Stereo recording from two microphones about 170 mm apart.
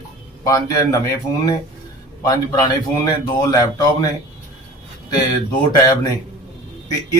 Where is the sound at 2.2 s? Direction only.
25° left (ahead or behind).